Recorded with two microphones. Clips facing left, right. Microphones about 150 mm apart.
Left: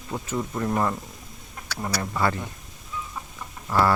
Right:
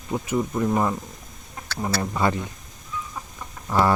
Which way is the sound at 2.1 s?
20° right (ahead or behind).